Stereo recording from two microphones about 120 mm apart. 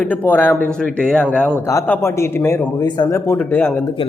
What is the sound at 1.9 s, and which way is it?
Speech, 20° left (ahead or behind).